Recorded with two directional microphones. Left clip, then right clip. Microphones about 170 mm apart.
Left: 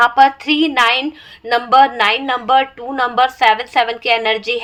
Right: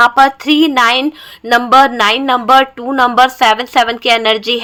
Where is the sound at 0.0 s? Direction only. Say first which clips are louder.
Right 2 dB; 50° right (ahead or behind).